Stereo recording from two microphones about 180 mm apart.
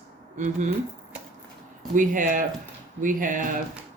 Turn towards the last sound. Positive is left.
turn(degrees=-50)  # may be behind; listen again after turning